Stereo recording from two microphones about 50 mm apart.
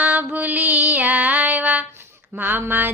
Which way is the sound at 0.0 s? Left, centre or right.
Right.